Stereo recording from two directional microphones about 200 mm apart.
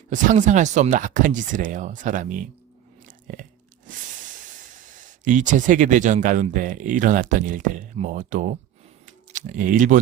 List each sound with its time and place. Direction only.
0.1 s speech: 40° right (ahead or behind)
4.9 s speech: 40° right (ahead or behind)
9.0 s a sound: 40° right (ahead or behind)